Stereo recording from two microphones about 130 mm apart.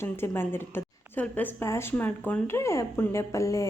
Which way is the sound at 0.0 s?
15° left (ahead or behind).